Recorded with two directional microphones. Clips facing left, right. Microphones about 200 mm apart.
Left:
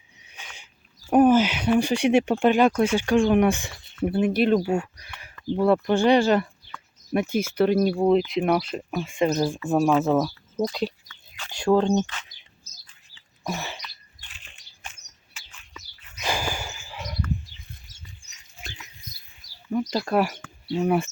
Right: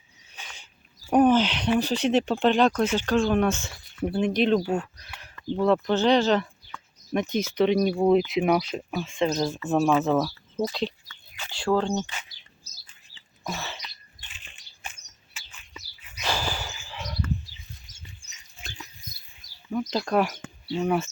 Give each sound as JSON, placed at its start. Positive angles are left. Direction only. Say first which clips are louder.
{"t": 0.3, "sound": "a sound", "louder": "even", "side_deg": 10}
{"t": 1.1, "sound": "speech", "louder": "left 2 dB", "side_deg": 10}
{"t": 10.2, "sound": "speech", "louder": "left 2 dB", "side_deg": -5}
{"t": 10.7, "sound": "speech", "louder": "left 2 dB", "side_deg": 10}
{"t": 13.5, "sound": "speech", "louder": "left 3 dB", "side_deg": 15}
{"t": 14.3, "sound": "bird", "louder": "even", "side_deg": 0}
{"t": 16.2, "sound": "a sound", "louder": "left 1 dB", "side_deg": 15}
{"t": 19.4, "sound": "bird", "louder": "left 2 dB", "side_deg": -20}
{"t": 19.9, "sound": "speech", "louder": "right 1 dB", "side_deg": 5}